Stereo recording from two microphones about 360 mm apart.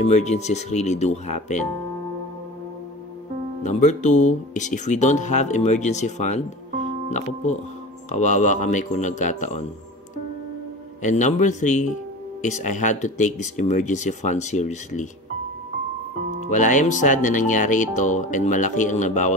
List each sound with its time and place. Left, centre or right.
0.0 s speech: centre
3.6 s speech: centre
11.0 s speech: centre
16.4 s speech: left